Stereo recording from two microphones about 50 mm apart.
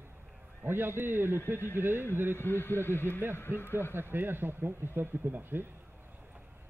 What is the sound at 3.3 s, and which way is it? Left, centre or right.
Speech, left.